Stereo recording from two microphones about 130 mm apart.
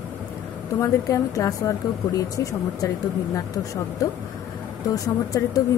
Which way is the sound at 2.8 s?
25° left (ahead or behind).